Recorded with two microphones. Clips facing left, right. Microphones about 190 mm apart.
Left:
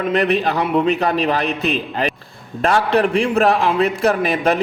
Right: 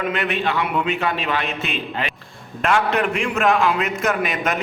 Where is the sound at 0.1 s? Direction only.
35° left (ahead or behind).